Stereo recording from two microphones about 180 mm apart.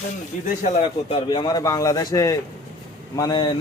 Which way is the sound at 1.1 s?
25° left (ahead or behind).